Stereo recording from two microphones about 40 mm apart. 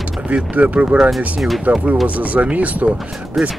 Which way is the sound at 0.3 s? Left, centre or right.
Right.